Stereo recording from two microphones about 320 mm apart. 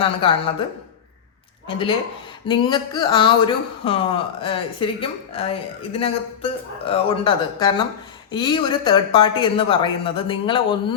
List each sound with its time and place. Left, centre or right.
0.0 s speech: centre
1.6 s speech: centre